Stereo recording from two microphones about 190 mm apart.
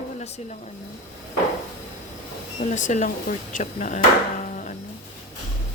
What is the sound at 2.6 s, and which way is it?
Speech, 40° left (ahead or behind).